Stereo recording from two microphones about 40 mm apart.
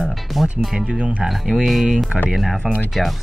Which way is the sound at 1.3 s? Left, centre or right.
Centre.